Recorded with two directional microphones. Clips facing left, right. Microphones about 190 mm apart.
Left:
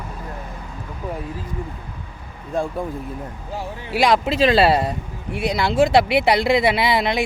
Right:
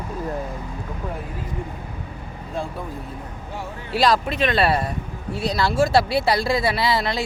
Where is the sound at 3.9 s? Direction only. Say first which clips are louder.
Left 2 dB; 20° left (ahead or behind).